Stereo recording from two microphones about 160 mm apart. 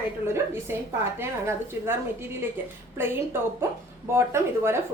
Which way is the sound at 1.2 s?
15° right (ahead or behind).